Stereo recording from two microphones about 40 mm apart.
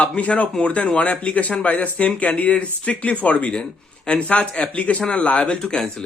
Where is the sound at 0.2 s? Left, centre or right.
Left.